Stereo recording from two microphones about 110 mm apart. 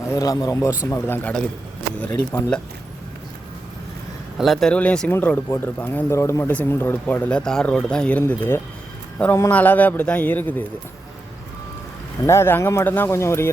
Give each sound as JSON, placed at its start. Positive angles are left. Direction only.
{"t": 0.1, "sound": "speech", "side_deg": 30}
{"t": 4.4, "sound": "speech", "side_deg": 0}
{"t": 6.5, "sound": "speech", "side_deg": 15}
{"t": 8.3, "sound": "a man's voice", "side_deg": 20}
{"t": 12.2, "sound": "speech", "side_deg": 25}